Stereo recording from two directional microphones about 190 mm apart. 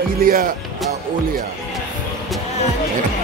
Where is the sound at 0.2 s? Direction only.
50° right (ahead or behind).